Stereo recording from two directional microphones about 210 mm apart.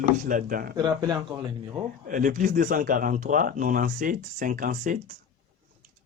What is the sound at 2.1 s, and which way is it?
Speech, 40° right (ahead or behind).